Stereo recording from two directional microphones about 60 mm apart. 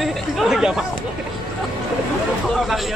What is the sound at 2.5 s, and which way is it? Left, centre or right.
Speech, centre.